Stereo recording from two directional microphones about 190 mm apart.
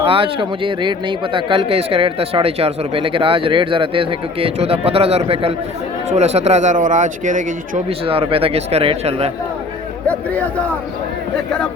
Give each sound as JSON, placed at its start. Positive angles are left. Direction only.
{"t": 0.1, "sound": "speech", "side_deg": -25}
{"t": 7.9, "sound": "speech", "side_deg": -30}